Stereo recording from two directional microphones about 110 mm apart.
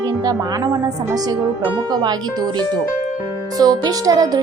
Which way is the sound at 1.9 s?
40° right (ahead or behind).